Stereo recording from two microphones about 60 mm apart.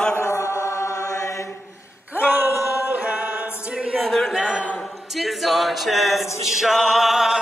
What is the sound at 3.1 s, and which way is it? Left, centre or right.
A capella, right.